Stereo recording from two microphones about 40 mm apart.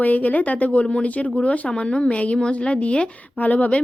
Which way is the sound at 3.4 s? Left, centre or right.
Left.